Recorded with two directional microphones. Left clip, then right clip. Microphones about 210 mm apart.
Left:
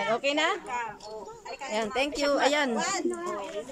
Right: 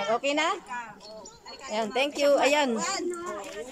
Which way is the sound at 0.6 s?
55° left (ahead or behind).